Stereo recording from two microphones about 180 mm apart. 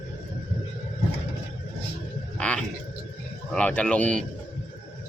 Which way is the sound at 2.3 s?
5° left (ahead or behind).